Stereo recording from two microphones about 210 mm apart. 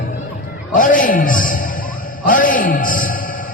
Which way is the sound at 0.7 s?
40° left (ahead or behind).